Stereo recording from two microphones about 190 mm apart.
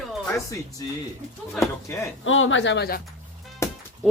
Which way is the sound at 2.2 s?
90° left.